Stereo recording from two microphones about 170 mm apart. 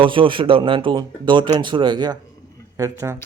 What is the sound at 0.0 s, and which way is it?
Speech, 30° right (ahead or behind).